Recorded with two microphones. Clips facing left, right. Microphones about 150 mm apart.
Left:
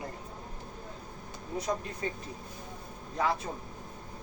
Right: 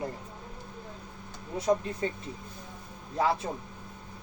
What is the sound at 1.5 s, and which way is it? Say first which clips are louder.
Speech: right 6 dB; 30° right (ahead or behind).